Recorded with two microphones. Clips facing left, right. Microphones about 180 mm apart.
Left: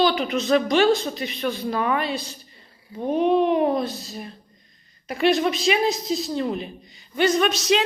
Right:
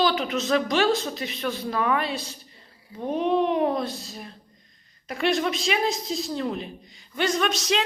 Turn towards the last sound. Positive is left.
turn(degrees=5)  # may be behind; listen again after turning